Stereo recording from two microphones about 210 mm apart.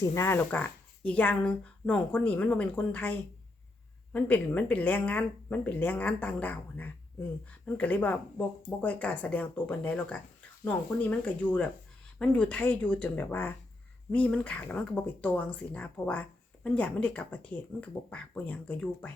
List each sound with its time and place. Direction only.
0.0 s a woman's voice: 15° left (ahead or behind)